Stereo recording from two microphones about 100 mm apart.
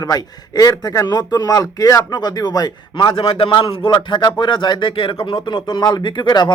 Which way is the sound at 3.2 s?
65° left (ahead or behind).